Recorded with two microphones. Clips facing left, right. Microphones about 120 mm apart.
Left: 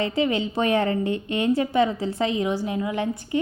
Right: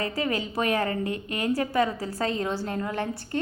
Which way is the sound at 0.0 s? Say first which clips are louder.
Left 5 dB; 25° left (ahead or behind).